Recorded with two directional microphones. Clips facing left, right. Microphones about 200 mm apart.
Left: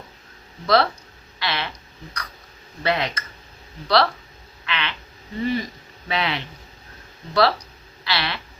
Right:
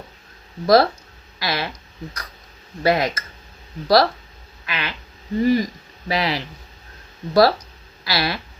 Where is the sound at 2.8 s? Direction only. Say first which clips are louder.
Right 5 dB; 40° right (ahead or behind).